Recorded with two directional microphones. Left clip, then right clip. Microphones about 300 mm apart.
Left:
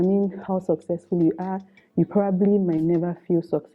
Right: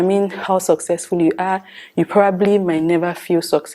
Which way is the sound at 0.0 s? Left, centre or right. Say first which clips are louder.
Right 7 dB; centre.